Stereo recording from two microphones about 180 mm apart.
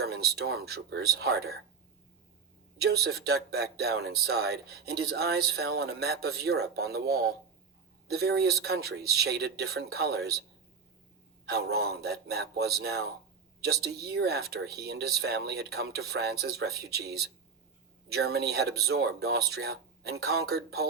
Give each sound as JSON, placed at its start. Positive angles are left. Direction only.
{"t": 0.0, "sound": "speech", "side_deg": -60}
{"t": 2.7, "sound": "speech", "side_deg": -60}
{"t": 11.4, "sound": "speech", "side_deg": -60}